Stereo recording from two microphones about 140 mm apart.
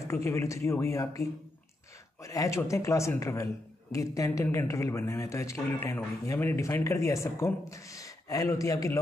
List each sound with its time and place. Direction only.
0.1 s speech: 20° left (ahead or behind)